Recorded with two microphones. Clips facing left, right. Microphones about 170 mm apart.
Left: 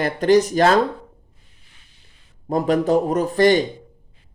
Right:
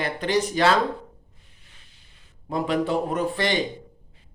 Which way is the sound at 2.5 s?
45° left (ahead or behind).